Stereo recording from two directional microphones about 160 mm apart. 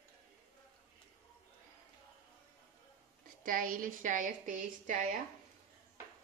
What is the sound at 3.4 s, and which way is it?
Speech, 60° right (ahead or behind).